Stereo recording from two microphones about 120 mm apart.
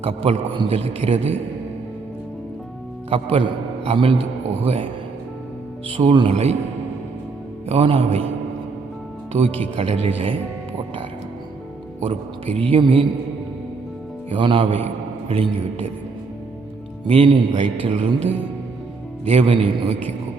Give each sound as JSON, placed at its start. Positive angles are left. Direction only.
{"t": 0.0, "sound": "a man's voice", "side_deg": -55}
{"t": 3.1, "sound": "a man's voice", "side_deg": -50}
{"t": 6.1, "sound": "a man's voice", "side_deg": -45}
{"t": 7.7, "sound": "a man's voice", "side_deg": -50}
{"t": 9.3, "sound": "a man's voice", "side_deg": -55}
{"t": 12.5, "sound": "a man's voice", "side_deg": -45}
{"t": 14.3, "sound": "a man's voice", "side_deg": -45}
{"t": 17.1, "sound": "a man's voice", "side_deg": -50}
{"t": 19.2, "sound": "a man's voice", "side_deg": -55}